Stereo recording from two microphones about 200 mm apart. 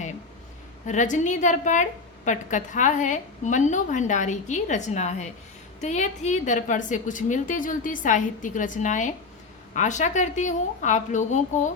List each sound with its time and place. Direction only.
0.9 s a woman's voice: 40° left (ahead or behind)